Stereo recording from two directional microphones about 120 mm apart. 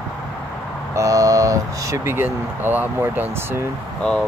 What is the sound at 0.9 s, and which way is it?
Speech, 25° right (ahead or behind).